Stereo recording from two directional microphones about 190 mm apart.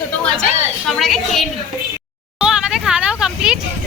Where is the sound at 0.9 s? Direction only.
Centre (ahead or behind).